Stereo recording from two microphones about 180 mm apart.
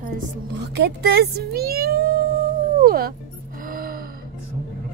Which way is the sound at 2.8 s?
55° right (ahead or behind).